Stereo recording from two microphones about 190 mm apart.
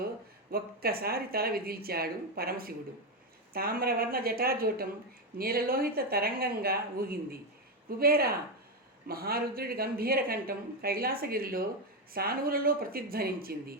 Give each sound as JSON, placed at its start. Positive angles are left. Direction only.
{"t": 0.5, "sound": "speech", "side_deg": -55}